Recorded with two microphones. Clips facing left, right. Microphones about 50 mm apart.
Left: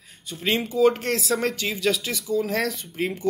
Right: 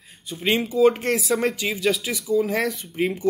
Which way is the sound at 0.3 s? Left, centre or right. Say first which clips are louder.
Right 2 dB; centre.